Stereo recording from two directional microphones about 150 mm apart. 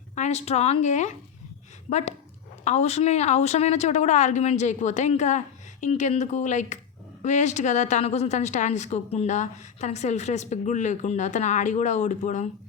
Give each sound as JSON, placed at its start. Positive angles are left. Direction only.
{"t": 0.2, "sound": "a woman's voice", "side_deg": 50}